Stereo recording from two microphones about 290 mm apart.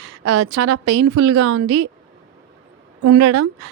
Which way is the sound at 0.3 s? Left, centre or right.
Right.